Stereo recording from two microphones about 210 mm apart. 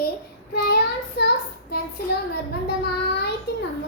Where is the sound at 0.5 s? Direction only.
50° left (ahead or behind).